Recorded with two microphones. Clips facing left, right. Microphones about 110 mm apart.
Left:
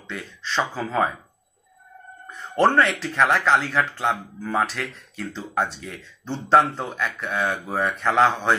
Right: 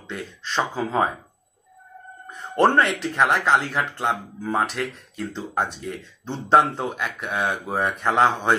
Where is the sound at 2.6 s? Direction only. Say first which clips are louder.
Even; 10° right (ahead or behind).